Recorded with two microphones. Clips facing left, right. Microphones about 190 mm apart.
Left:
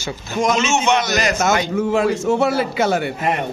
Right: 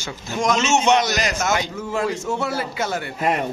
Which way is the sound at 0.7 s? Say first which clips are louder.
Even; 35° right (ahead or behind).